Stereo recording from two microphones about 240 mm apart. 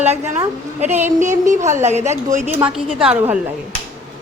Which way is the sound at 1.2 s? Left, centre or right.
Right.